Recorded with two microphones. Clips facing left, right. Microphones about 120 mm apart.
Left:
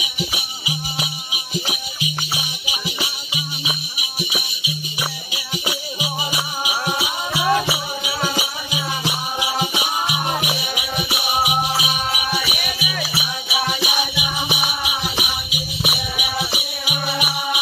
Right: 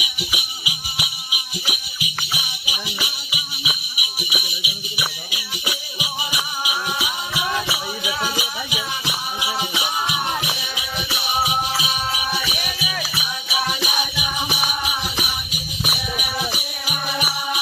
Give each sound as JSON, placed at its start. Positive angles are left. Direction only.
{"t": 0.0, "sound": "music", "side_deg": 30}